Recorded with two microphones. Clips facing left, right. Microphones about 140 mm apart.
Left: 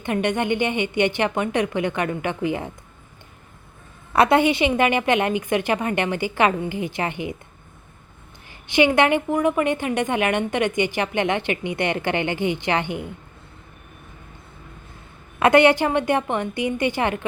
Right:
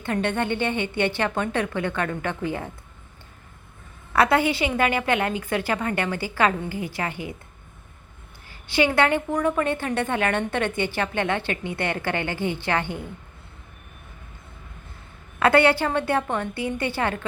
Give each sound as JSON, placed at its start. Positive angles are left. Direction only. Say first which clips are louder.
{"t": 0.0, "sound": "a woman's voice", "louder": "left 2 dB", "side_deg": 15}
{"t": 4.1, "sound": "a woman's voice", "louder": "left 3 dB", "side_deg": 20}
{"t": 8.4, "sound": "a woman's voice", "louder": "left 4 dB", "side_deg": 20}
{"t": 15.4, "sound": "a woman's voice", "louder": "left 3 dB", "side_deg": 20}